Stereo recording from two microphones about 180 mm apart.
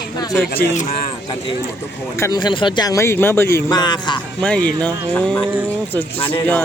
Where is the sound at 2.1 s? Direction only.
20° left (ahead or behind).